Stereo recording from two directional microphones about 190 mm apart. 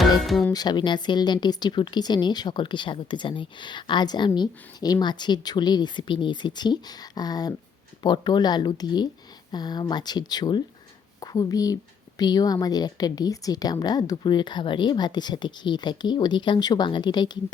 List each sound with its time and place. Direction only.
0.2 s speech: centre (ahead or behind)
0.5 s speech: 20° left (ahead or behind)